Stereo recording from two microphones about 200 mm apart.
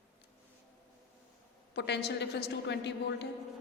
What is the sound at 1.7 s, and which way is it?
A woman's voice, 55° left (ahead or behind).